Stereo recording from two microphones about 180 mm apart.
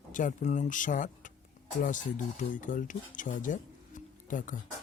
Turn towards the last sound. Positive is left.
turn(degrees=45)  # may be behind; listen again after turning